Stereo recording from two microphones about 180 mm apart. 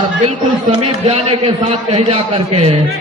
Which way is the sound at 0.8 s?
35° right (ahead or behind).